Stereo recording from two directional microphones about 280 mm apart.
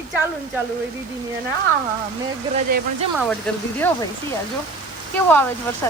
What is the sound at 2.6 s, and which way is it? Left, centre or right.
Speech, right.